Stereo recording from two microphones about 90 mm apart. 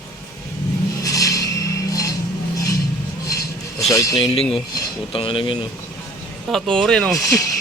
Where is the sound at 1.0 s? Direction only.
40° left (ahead or behind).